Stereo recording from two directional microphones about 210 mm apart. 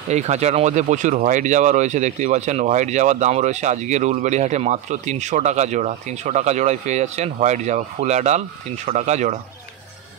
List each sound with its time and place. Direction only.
0.1 s speech: 30° right (ahead or behind)